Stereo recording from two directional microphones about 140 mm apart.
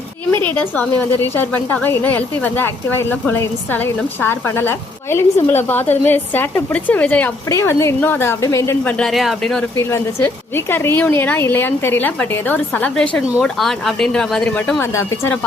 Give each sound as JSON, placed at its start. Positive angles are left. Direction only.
{"t": 0.4, "sound": "a woman's voice", "side_deg": 15}
{"t": 9.7, "sound": "a woman's voice", "side_deg": 20}
{"t": 14.8, "sound": "speech", "side_deg": 20}